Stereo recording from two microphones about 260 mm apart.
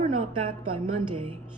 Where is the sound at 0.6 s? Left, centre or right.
Centre.